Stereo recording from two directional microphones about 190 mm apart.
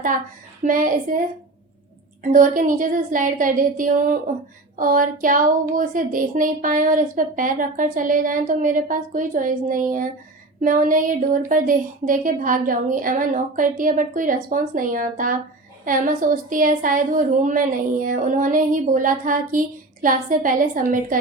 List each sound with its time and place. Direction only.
0.6 s speech: 45° right (ahead or behind)
2.2 s speech: 45° right (ahead or behind)